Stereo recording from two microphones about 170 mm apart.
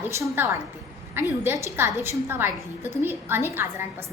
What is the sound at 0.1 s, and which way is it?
A woman's voice, 15° right (ahead or behind).